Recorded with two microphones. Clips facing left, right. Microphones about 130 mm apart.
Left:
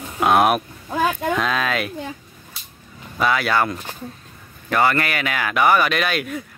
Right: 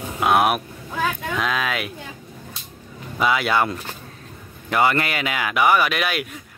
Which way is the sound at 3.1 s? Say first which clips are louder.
Even; 15° right (ahead or behind).